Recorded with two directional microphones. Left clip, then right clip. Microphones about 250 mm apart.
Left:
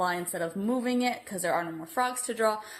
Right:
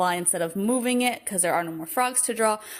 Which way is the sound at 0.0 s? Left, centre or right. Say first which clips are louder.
Right 5 dB; right.